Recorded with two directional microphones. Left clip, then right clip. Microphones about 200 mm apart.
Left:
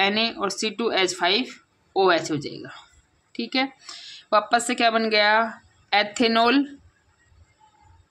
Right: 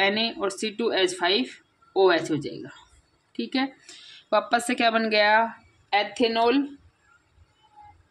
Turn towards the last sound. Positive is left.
turn(degrees=30)  # may be behind; listen again after turning